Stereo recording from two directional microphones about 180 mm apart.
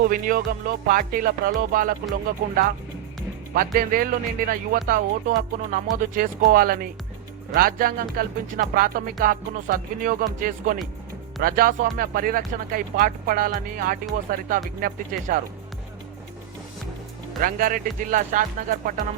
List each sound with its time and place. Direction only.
0.0 s music: 55° right (ahead or behind)
2.4 s speech: 55° right (ahead or behind)
3.8 s music: 50° right (ahead or behind)
17.4 s music: 50° right (ahead or behind)